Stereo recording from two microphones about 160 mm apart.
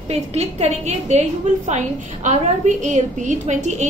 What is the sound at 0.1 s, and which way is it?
A woman's voice, 40° right (ahead or behind).